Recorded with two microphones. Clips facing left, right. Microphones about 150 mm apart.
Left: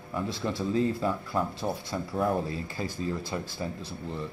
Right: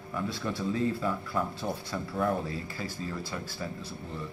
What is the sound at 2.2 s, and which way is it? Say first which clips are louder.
Speech: left 2 dB; 20° left (ahead or behind).